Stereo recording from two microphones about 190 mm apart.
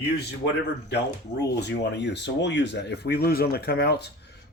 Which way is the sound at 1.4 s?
65° left (ahead or behind).